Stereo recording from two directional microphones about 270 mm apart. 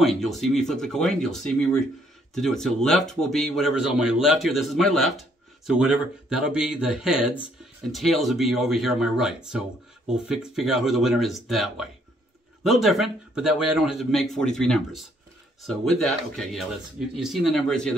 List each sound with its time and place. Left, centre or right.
0.0 s speech: centre
16.4 s speech: centre